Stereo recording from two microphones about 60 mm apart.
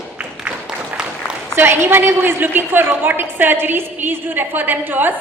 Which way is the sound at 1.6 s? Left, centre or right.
Right.